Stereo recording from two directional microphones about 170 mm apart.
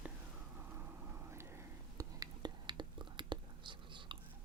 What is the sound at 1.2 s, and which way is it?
Whispering, 15° right (ahead or behind).